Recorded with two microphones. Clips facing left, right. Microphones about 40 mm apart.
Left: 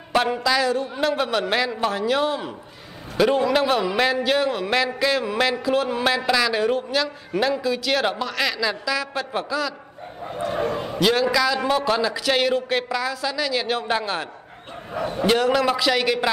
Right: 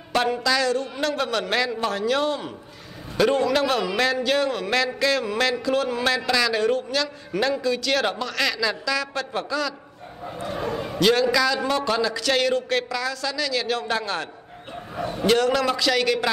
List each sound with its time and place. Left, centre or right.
0.1 s speech: centre
10.5 s a sound: centre
11.0 s a man's voice: centre
15.2 s speech: centre